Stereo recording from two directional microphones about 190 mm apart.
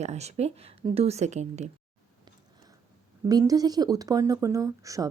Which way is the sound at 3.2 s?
20° right (ahead or behind).